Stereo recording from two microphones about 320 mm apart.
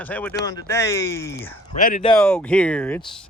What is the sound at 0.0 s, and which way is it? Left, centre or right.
Speech, centre.